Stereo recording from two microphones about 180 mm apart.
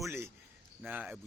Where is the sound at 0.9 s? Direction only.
5° right (ahead or behind).